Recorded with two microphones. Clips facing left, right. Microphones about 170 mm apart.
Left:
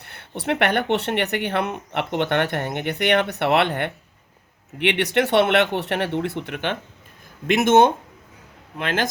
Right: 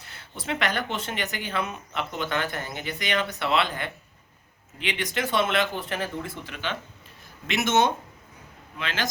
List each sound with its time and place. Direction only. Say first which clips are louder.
0.0 s speech: left 9 dB; 60° left (ahead or behind)